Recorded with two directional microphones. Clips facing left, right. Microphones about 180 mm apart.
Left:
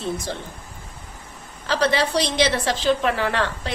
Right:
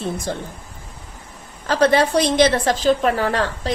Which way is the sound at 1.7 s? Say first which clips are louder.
Right 5 dB; 50° right (ahead or behind).